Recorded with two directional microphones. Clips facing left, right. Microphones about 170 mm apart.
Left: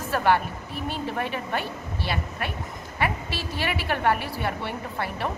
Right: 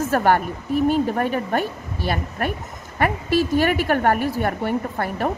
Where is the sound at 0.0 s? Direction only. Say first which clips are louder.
Right 4 dB; 45° right (ahead or behind).